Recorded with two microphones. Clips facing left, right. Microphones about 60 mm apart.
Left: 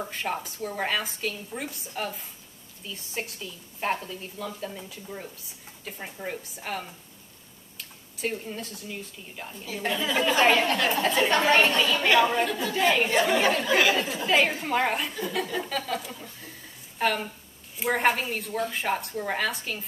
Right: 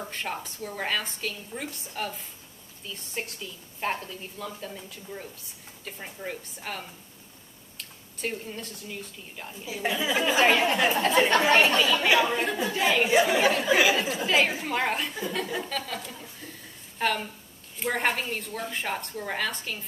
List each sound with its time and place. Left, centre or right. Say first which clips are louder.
0.0 s speech: left 3 dB; centre